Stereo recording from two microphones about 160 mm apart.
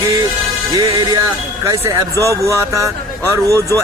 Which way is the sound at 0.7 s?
20° right (ahead or behind).